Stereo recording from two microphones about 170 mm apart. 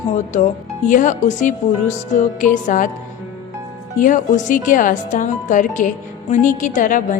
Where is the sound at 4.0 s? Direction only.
50° left (ahead or behind).